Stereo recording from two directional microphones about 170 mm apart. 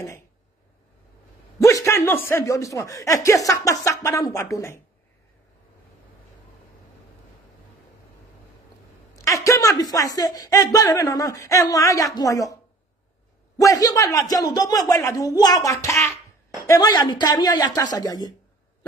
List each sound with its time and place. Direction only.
1.6 s speech: 20° left (ahead or behind)
9.1 s speech: 20° left (ahead or behind)
13.6 s speech: 20° left (ahead or behind)